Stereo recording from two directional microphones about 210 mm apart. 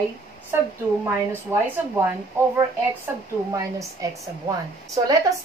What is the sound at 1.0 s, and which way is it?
A woman's voice, 10° right (ahead or behind).